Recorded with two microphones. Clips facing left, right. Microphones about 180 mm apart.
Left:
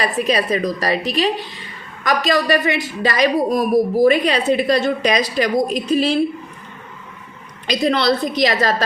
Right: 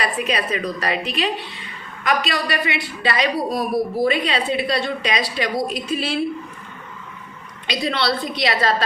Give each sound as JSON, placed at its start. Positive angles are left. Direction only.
{"t": 0.0, "sound": "a woman's voice", "side_deg": 40}
{"t": 7.9, "sound": "a woman's voice", "side_deg": 45}